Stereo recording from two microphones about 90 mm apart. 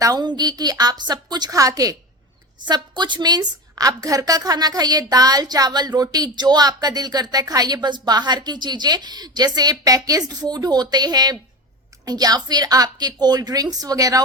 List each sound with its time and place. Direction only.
0.0 s a woman's voice: 50° right (ahead or behind)
2.6 s a woman's voice: 55° right (ahead or behind)